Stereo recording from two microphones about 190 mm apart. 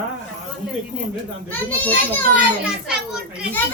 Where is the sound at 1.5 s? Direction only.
10° left (ahead or behind).